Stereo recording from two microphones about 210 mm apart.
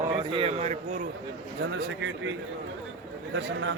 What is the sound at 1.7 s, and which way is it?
Speech, 60° right (ahead or behind).